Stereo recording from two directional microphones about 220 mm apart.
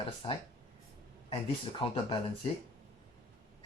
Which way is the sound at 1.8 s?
25° left (ahead or behind).